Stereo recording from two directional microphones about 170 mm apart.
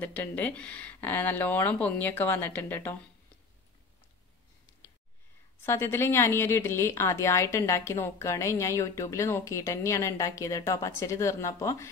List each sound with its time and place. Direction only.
0.0 s a woman's voice: 10° left (ahead or behind)
5.6 s a woman's voice: 15° left (ahead or behind)